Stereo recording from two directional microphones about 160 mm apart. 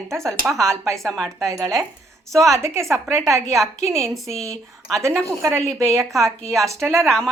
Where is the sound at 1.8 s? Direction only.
20° right (ahead or behind).